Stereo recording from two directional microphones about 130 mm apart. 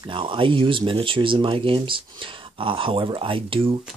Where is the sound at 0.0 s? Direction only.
40° right (ahead or behind).